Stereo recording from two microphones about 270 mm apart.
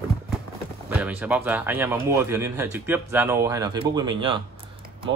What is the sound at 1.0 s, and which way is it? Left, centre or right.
Speech, centre.